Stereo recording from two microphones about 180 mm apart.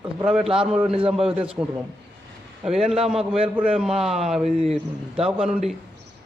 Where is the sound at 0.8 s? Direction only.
30° right (ahead or behind).